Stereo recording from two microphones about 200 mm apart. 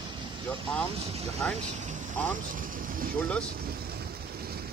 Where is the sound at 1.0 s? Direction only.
30° right (ahead or behind).